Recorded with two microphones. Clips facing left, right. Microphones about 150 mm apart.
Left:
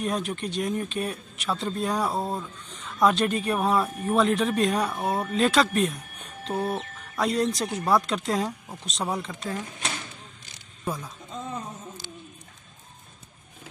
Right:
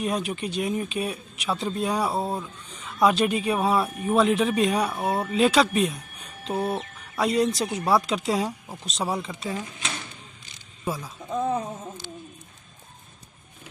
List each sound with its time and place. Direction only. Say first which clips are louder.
0.0 s speech: right 1 dB; 5° right (ahead or behind)
10.8 s speech: right 1 dB; 5° right (ahead or behind)
11.3 s speech: right 10 dB; 60° right (ahead or behind)